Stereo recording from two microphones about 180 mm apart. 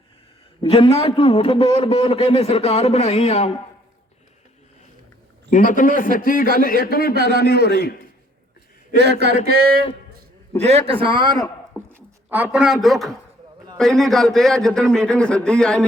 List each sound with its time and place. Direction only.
0.6 s a man's voice: 30° left (ahead or behind)
5.5 s a man's voice: 45° left (ahead or behind)
7.1 s a man's voice: 65° right (ahead or behind)
7.3 s a man's voice: 60° left (ahead or behind)
9.0 s speech: 65° right (ahead or behind)
10.7 s a man's voice: 35° right (ahead or behind)
11.9 s a man's voice: 10° right (ahead or behind); by 15.8 s 5° left (ahead or behind)